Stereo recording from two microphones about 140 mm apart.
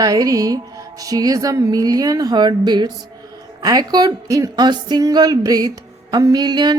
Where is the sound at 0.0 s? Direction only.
25° right (ahead or behind).